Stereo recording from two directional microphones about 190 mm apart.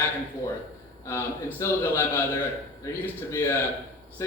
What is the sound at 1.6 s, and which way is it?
Speech, 10° left (ahead or behind).